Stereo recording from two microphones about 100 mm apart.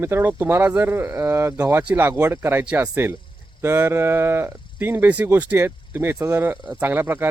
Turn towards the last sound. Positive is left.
turn(degrees=-20)  # may be behind; listen again after turning